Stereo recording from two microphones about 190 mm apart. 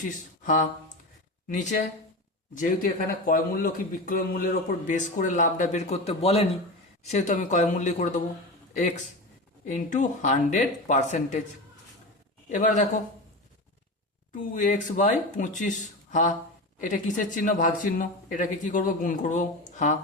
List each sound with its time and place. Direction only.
0.4 s a man's voice: 45° left (ahead or behind)
9.6 s speech: 40° left (ahead or behind)
12.5 s speech: 40° left (ahead or behind)
14.5 s speech: 40° left (ahead or behind)
16.7 s speech: 40° left (ahead or behind)